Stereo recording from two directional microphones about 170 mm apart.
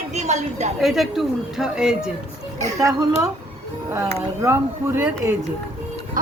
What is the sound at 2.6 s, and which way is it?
A child's voice, 20° right (ahead or behind).